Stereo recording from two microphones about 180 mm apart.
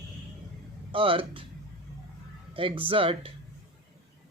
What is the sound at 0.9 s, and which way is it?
Speech, 30° right (ahead or behind).